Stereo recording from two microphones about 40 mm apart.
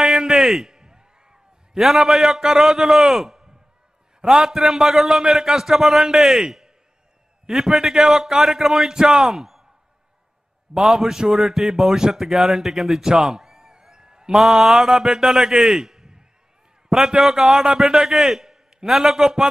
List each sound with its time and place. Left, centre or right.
0.0 s a sound: centre
1.8 s a man's voice: centre
4.5 s a man's voice: centre
10.7 s a man's voice: centre
14.5 s a man's voice: centre